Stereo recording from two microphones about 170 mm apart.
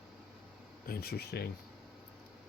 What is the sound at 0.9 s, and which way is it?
Speech, 65° left (ahead or behind).